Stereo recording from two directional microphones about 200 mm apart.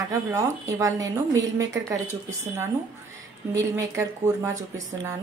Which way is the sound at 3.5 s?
15° right (ahead or behind).